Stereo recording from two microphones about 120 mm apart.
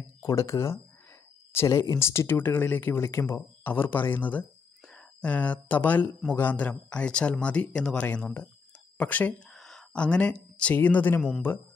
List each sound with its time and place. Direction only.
0.2 s speech: 25° left (ahead or behind)
9.5 s speech: centre (ahead or behind)